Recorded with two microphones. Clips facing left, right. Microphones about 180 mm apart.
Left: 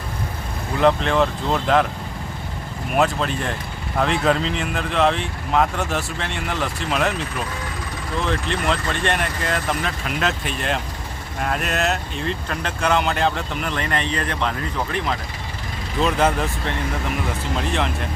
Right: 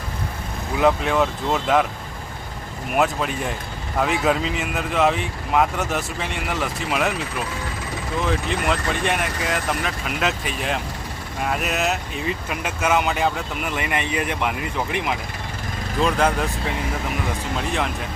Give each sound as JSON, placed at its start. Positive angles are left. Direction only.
{"t": 0.8, "sound": "speech", "side_deg": -5}
{"t": 2.9, "sound": "speech", "side_deg": -5}
{"t": 8.3, "sound": "speech", "side_deg": -5}
{"t": 16.0, "sound": "speech", "side_deg": 0}